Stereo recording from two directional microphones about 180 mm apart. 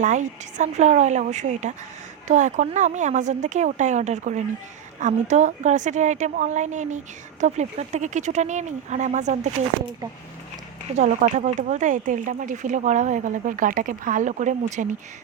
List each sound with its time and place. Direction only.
0.0 s speech: 40° right (ahead or behind)
10.9 s speech: 40° right (ahead or behind)